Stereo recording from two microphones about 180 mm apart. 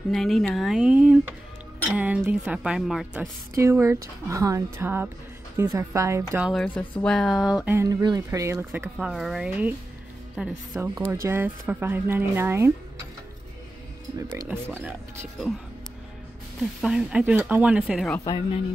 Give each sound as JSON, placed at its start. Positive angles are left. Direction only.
{"t": 0.1, "sound": "speech", "side_deg": 0}
{"t": 3.5, "sound": "speech", "side_deg": -15}
{"t": 6.4, "sound": "speech", "side_deg": 0}
{"t": 7.7, "sound": "speech", "side_deg": -20}
{"t": 14.8, "sound": "speech", "side_deg": -5}
{"t": 16.8, "sound": "speech", "side_deg": -5}
{"t": 18.2, "sound": "speech", "side_deg": 25}